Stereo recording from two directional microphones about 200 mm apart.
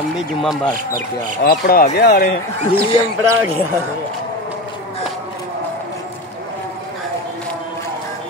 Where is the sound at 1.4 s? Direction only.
50° left (ahead or behind).